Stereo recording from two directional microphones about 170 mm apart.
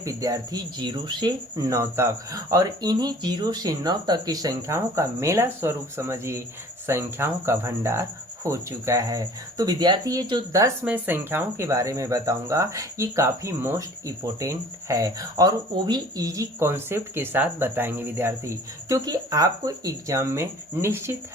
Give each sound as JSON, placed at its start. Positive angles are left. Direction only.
{"t": 0.0, "sound": "speech", "side_deg": -20}
{"t": 10.8, "sound": "speech", "side_deg": -10}